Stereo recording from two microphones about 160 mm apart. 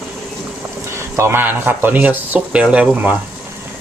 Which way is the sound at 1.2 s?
15° right (ahead or behind).